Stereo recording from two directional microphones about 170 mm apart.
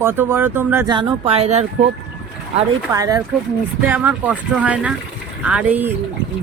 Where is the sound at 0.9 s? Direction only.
25° right (ahead or behind).